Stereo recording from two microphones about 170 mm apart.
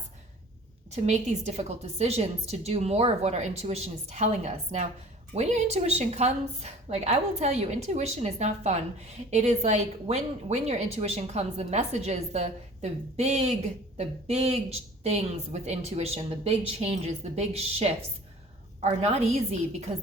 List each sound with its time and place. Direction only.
0.9 s a woman's voice: 40° right (ahead or behind)